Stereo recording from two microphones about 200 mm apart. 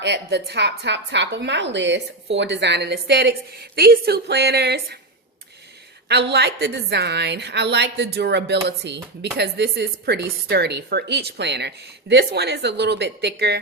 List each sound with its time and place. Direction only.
0.0 s speech: 60° right (ahead or behind)
6.1 s speech: 55° right (ahead or behind)